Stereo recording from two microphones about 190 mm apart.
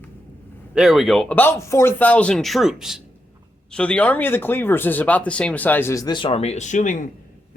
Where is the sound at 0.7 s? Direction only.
Centre (ahead or behind).